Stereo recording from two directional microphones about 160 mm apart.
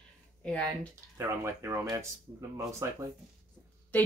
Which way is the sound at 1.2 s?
15° right (ahead or behind).